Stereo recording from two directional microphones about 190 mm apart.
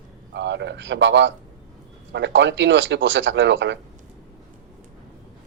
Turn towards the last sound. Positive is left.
turn(degrees=-70)  # may be behind; listen again after turning